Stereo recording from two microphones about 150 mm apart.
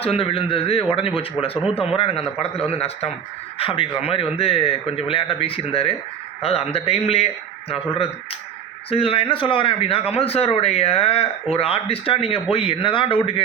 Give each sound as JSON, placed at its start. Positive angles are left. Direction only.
{"t": 0.0, "sound": "speech", "side_deg": 40}